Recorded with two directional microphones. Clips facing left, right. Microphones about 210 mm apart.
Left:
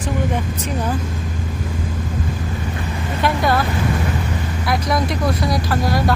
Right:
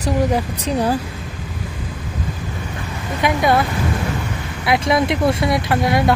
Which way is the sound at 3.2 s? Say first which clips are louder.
Right 2 dB; 20° right (ahead or behind).